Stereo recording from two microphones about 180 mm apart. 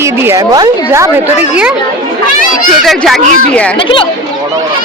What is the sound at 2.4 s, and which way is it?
Speech, 50° left (ahead or behind).